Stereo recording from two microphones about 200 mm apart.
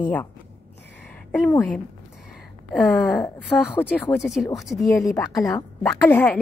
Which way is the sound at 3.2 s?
10° left (ahead or behind).